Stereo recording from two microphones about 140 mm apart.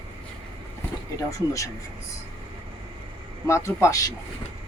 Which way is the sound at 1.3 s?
25° left (ahead or behind).